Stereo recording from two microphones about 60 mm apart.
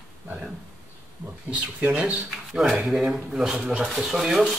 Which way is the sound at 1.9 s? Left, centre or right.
Centre.